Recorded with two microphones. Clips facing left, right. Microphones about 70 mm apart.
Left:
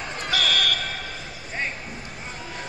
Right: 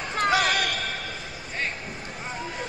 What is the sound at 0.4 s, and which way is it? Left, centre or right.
Basketball bounce, centre.